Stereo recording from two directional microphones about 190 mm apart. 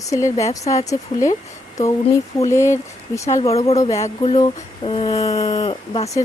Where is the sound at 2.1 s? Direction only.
15° left (ahead or behind).